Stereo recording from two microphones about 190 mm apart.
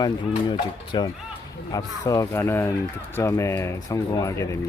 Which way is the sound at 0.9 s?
25° left (ahead or behind).